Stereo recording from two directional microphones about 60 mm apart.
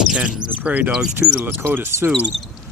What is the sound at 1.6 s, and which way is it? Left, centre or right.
Speech, right.